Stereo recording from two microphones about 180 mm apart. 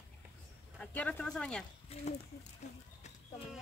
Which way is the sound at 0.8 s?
10° left (ahead or behind).